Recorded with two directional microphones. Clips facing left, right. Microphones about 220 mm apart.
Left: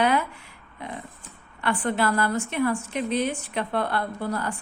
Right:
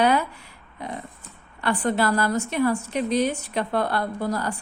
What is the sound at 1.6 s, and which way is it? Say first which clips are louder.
A woman's voice: right 2 dB; 40° right (ahead or behind).